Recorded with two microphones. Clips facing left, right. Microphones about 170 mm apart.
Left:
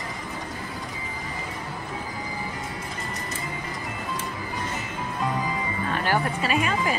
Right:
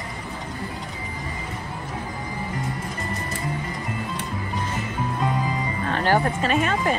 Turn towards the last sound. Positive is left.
turn(degrees=-45)  # may be behind; listen again after turning